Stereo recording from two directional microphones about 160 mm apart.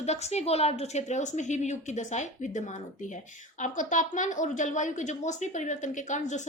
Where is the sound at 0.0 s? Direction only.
45° left (ahead or behind).